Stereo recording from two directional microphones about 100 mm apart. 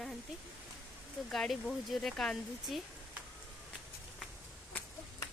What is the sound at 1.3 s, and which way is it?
Speech, centre (ahead or behind).